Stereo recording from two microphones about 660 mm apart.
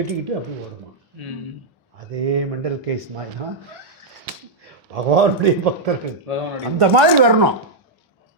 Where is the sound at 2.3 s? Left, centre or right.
Right.